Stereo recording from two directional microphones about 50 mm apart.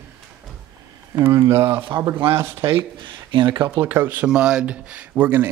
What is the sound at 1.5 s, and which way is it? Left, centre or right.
Speech, right.